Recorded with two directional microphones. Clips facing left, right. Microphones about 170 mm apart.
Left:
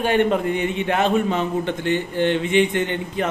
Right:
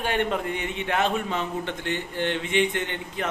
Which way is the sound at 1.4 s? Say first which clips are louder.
Left 7 dB; 15° left (ahead or behind).